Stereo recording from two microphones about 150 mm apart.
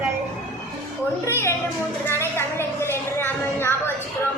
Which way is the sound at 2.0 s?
15° left (ahead or behind).